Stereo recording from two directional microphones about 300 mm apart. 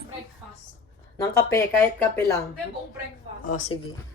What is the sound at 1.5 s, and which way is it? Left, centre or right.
Speech, centre.